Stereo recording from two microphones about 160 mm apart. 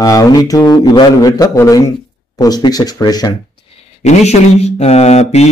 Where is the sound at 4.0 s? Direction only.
40° left (ahead or behind).